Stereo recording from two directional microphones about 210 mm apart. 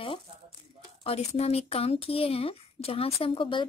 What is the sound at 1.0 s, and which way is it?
A woman's voice, 30° left (ahead or behind).